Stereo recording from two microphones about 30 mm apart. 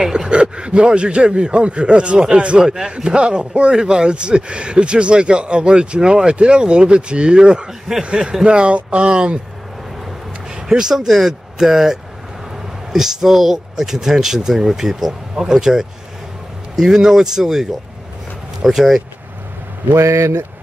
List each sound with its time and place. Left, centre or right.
0.0 s speech: right
0.3 s speech: right
2.1 s speech: right
8.5 s speech: right
10.5 s speech: right
11.1 s speech: centre
16.9 s speech: centre